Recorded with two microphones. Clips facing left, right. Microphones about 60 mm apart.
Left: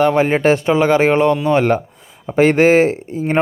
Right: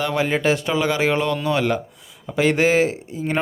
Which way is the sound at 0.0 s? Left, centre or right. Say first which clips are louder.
Left 7 dB; left.